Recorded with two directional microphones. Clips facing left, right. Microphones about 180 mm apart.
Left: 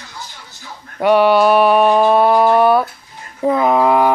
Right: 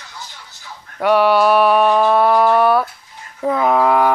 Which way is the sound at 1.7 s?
20° left (ahead or behind).